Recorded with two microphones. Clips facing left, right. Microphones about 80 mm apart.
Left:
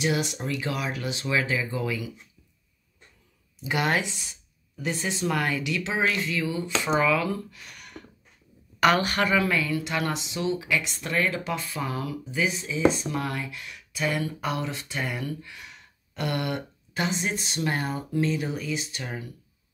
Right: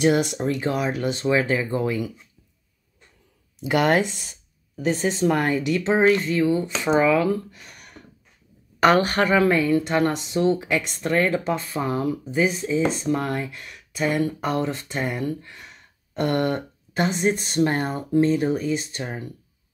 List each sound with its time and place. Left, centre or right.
0.0 s speech: right
0.4 s speech: right
3.6 s speech: right